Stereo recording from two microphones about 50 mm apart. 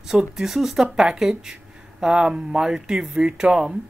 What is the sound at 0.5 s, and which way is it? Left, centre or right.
Speech, centre.